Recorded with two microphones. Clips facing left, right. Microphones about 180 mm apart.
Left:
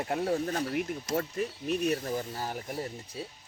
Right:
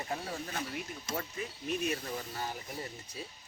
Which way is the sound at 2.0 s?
35° left (ahead or behind).